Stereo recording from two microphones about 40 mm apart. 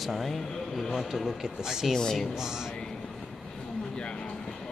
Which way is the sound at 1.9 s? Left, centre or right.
Centre.